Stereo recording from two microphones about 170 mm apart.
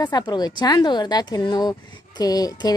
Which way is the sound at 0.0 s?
25° left (ahead or behind).